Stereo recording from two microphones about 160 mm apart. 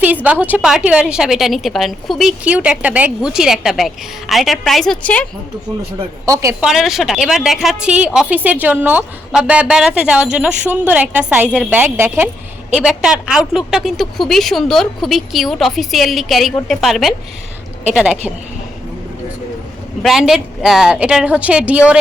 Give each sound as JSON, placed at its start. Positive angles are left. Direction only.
{"t": 0.0, "sound": "a woman's voice", "side_deg": -10}
{"t": 6.2, "sound": "speech", "side_deg": -20}
{"t": 6.6, "sound": "a woman's voice", "side_deg": -5}
{"t": 20.0, "sound": "a woman's voice", "side_deg": 0}